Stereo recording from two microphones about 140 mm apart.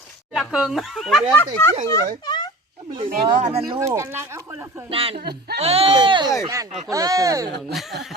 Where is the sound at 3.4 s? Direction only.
50° right (ahead or behind).